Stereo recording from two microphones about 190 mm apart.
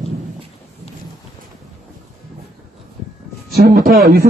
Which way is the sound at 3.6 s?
50° right (ahead or behind).